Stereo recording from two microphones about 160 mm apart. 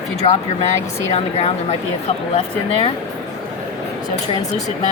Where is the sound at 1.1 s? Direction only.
40° left (ahead or behind).